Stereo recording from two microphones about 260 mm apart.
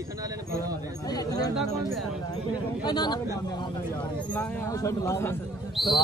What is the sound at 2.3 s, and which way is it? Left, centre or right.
Speech, centre.